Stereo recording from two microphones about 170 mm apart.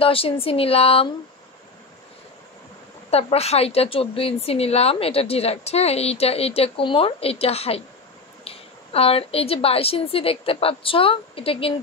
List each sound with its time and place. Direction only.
0.0 s a woman's voice: 35° left (ahead or behind)
3.1 s a woman's voice: 35° left (ahead or behind)